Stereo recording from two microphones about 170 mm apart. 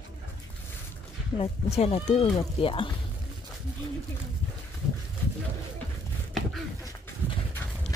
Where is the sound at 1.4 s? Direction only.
35° left (ahead or behind).